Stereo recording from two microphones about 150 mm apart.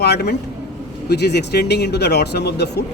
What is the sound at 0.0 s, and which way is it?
Speech, 90° left.